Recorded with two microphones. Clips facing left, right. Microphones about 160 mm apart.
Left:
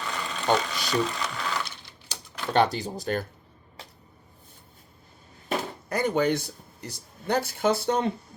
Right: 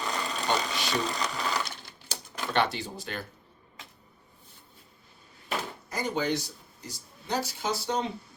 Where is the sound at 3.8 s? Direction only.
35° left (ahead or behind).